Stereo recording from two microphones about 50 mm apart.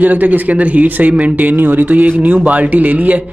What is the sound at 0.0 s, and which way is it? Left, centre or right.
Speech, right.